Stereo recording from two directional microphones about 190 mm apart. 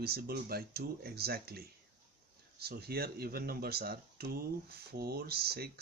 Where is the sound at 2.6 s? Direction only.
55° right (ahead or behind).